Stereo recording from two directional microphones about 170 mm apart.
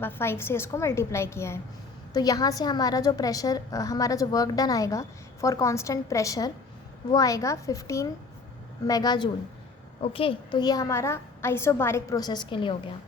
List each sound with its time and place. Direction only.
0.0 s a woman's voice: 15° left (ahead or behind); by 12.7 s 30° left (ahead or behind)